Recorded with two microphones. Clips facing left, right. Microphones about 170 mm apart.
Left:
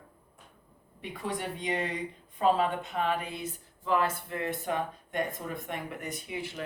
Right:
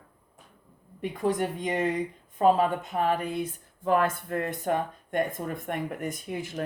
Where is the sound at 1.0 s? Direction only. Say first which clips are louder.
Right 8 dB; 45° right (ahead or behind).